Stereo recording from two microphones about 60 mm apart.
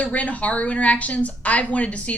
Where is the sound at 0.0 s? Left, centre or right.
Left.